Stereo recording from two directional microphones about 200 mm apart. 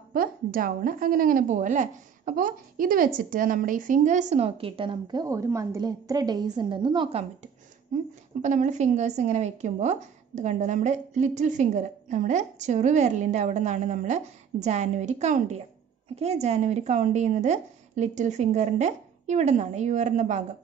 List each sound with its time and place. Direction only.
0.1 s speech: 45° right (ahead or behind); by 7.2 s 25° right (ahead or behind)
8.4 s speech: 40° right (ahead or behind)